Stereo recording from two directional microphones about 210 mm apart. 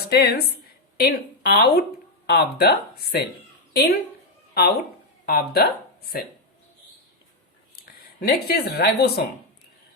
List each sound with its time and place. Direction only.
0.0 s speech: 50° left (ahead or behind)
5.2 s speech: 50° left (ahead or behind)
7.8 s speech: 45° left (ahead or behind)